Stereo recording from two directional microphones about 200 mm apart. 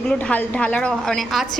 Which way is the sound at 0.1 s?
5° left (ahead or behind).